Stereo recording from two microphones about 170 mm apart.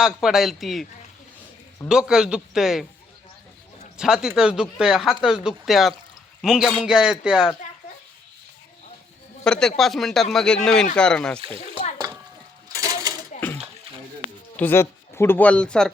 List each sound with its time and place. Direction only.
0.0 s speech: centre (ahead or behind)
1.9 s speech: 5° right (ahead or behind)
3.9 s speech: 5° right (ahead or behind)
9.4 s speech: 5° left (ahead or behind)
11.3 s speech: 35° right (ahead or behind)
12.6 s a sound: 20° right (ahead or behind)
14.5 s speech: 10° left (ahead or behind)